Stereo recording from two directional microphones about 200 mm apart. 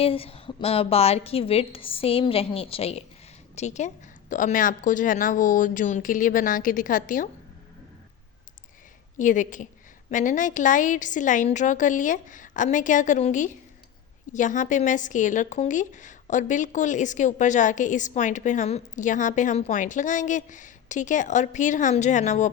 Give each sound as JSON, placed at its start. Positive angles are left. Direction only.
{"t": 0.0, "sound": "a woman's voice", "side_deg": 30}
{"t": 9.1, "sound": "a woman's voice", "side_deg": 40}